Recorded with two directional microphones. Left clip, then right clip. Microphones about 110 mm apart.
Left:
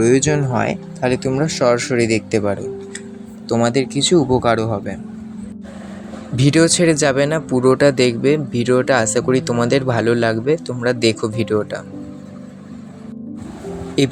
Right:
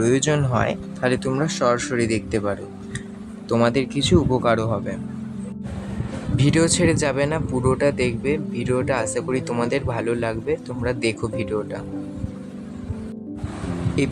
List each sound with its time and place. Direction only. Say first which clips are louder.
0.0 s speech: left 5 dB; 15° left (ahead or behind); by 2.6 s 35° left (ahead or behind)
3.5 s speech: left 3 dB; 25° left (ahead or behind)
6.3 s speech: left 5 dB; 35° left (ahead or behind)
14.0 s speech: left 7 dB; 30° left (ahead or behind)